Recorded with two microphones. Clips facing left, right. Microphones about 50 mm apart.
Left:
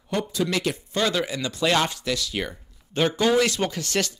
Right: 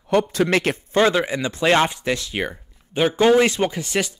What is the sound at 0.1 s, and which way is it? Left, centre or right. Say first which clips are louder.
Speech: right 7 dB; right.